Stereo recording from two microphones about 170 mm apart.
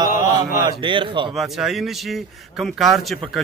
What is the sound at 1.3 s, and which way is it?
A man's voice, centre (ahead or behind).